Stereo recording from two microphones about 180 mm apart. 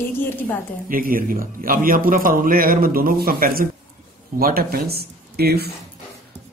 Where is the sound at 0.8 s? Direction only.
50° right (ahead or behind).